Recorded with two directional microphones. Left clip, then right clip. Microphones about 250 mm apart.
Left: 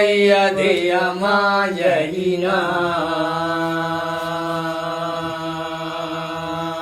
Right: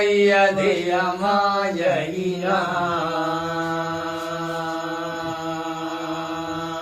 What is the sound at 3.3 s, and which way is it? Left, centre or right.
Music, left.